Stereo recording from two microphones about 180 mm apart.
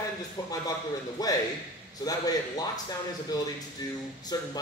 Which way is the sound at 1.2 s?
20° left (ahead or behind).